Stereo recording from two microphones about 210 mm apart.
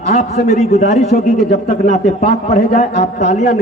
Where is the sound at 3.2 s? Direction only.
35° left (ahead or behind).